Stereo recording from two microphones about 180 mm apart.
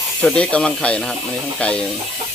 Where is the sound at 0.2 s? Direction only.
5° left (ahead or behind).